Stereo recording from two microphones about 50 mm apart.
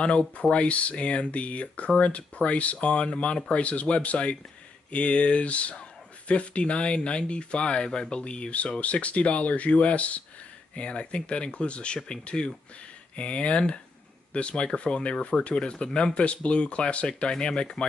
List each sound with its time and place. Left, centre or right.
0.0 s speech: left